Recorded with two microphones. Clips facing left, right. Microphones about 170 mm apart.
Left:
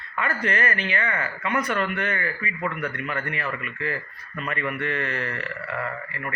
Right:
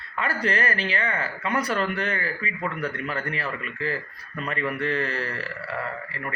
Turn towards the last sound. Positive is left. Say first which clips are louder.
# even
turn(degrees=-35)  # may be behind; listen again after turning